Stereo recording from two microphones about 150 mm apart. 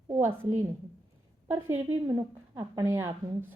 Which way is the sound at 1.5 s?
15° right (ahead or behind).